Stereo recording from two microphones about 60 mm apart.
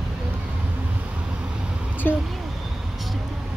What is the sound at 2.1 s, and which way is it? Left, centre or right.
Vehicle, left.